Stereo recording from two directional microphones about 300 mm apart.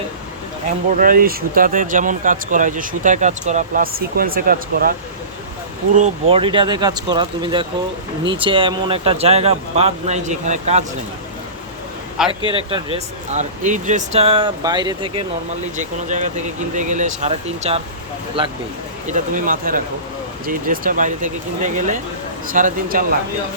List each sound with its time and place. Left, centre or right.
0.9 s speech: right
12.3 s speech: centre
12.7 s speech: right